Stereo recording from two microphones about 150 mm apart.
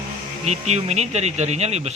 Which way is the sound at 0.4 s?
50° right (ahead or behind).